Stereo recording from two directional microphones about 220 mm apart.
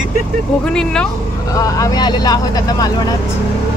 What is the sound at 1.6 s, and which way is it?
Speech, 15° left (ahead or behind).